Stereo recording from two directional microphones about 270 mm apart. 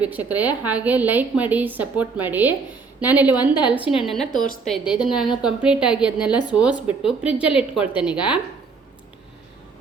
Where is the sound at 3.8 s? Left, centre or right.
Centre.